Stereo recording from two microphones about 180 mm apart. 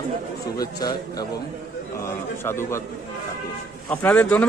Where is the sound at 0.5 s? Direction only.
20° left (ahead or behind).